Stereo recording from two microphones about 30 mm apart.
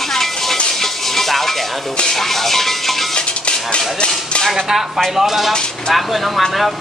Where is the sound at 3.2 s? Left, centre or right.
Left.